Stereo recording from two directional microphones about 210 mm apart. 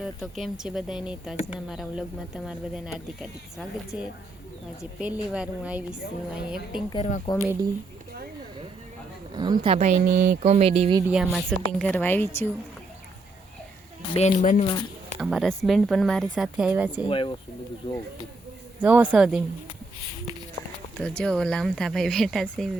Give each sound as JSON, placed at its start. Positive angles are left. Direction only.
{"t": 0.0, "sound": "speech", "side_deg": 0}
{"t": 6.9, "sound": "speech", "side_deg": 35}
{"t": 9.3, "sound": "a woman's voice", "side_deg": -20}
{"t": 11.1, "sound": "speech", "side_deg": 0}
{"t": 14.1, "sound": "speech", "side_deg": 35}
{"t": 15.2, "sound": "speech", "side_deg": 0}
{"t": 16.9, "sound": "speech", "side_deg": 25}
{"t": 18.8, "sound": "speech", "side_deg": -5}
{"t": 21.2, "sound": "speech", "side_deg": 5}